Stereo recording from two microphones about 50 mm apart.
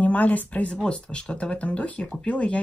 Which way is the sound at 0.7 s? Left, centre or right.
Centre.